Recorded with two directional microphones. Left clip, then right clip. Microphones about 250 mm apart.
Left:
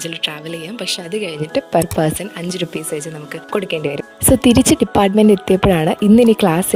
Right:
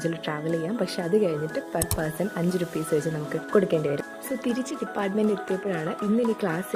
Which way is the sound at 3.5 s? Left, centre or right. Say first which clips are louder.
Left 3 dB; left.